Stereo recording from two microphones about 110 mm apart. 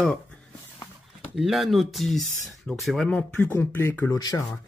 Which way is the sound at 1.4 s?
Centre (ahead or behind).